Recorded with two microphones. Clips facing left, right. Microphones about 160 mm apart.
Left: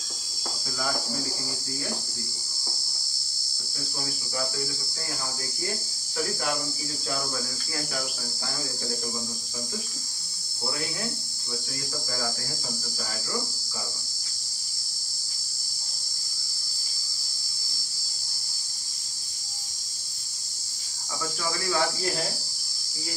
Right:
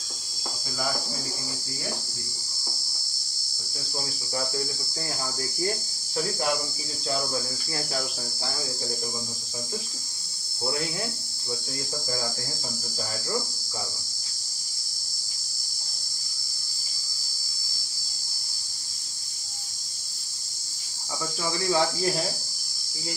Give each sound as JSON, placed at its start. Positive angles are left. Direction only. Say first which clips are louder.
{"t": 21.4, "sound": "cricket", "louder": "right 3 dB", "side_deg": -25}